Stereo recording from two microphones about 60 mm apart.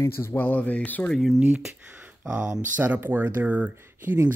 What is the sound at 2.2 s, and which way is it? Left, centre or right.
Speech, right.